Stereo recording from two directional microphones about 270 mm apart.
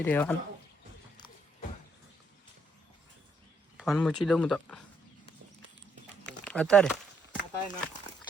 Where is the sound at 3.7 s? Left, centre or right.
Centre.